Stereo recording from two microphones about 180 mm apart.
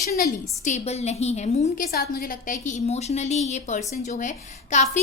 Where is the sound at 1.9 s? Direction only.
55° left (ahead or behind).